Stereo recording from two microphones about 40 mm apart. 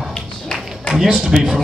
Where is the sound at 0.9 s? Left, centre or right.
Centre.